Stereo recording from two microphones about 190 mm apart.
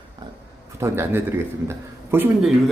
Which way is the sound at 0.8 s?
10° right (ahead or behind).